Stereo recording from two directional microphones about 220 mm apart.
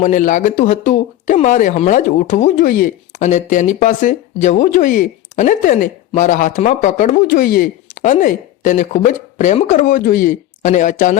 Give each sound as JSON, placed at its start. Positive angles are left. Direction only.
{"t": 0.0, "sound": "speech", "side_deg": 35}